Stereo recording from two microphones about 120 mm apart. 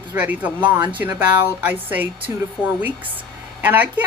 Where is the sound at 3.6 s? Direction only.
15° right (ahead or behind).